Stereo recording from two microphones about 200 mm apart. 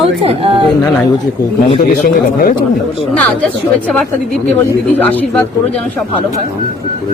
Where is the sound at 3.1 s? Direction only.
5° left (ahead or behind).